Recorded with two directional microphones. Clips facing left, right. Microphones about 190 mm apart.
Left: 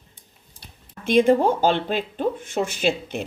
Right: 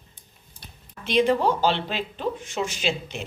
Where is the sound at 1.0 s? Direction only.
50° left (ahead or behind).